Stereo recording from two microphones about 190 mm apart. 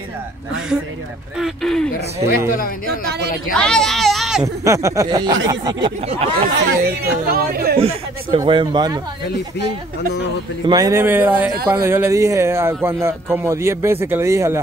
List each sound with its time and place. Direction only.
1.4 s speech: centre (ahead or behind)
3.5 s speech: 5° left (ahead or behind)
4.6 s a man's voice: 15° right (ahead or behind)
6.4 s speech: 50° right (ahead or behind)
8.4 s speech: 25° right (ahead or behind)
10.7 s a man's voice: 15° right (ahead or behind)
11.6 s a man's voice: 25° right (ahead or behind)